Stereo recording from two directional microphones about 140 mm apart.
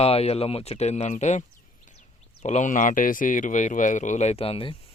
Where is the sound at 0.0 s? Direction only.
45° left (ahead or behind).